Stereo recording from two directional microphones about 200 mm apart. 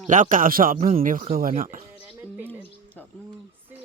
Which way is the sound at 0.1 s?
40° right (ahead or behind).